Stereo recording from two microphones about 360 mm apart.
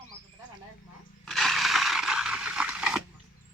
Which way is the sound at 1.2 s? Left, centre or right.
Centre.